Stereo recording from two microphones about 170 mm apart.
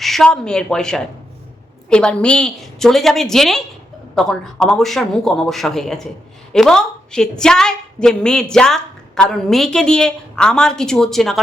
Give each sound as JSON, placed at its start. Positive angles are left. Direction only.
{"t": 0.0, "sound": "a woman's voice", "side_deg": 0}